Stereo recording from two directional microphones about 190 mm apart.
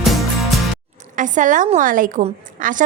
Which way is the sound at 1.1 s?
40° right (ahead or behind).